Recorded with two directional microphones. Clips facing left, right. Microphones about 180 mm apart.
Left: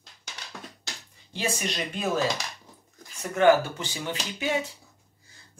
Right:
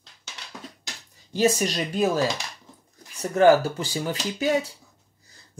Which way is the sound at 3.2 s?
35° right (ahead or behind).